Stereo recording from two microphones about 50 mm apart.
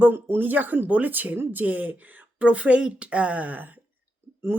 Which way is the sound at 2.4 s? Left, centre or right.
Right.